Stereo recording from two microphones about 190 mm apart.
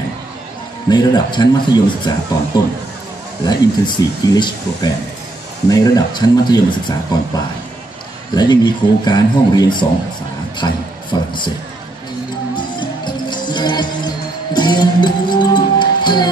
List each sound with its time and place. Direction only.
0.8 s speech: 20° left (ahead or behind)
12.5 s music: 25° left (ahead or behind)